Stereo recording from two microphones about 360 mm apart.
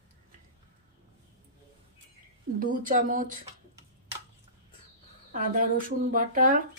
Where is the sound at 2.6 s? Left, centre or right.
Right.